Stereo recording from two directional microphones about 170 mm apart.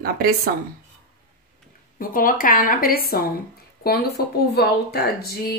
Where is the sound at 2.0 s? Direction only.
55° left (ahead or behind).